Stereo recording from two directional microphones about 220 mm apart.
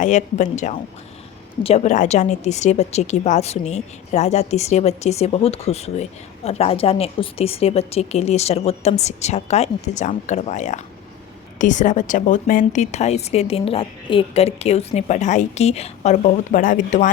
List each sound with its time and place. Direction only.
0.0 s speech: 35° left (ahead or behind)